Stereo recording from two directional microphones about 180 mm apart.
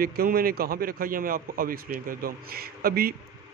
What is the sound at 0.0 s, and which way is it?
A man's voice, 55° right (ahead or behind).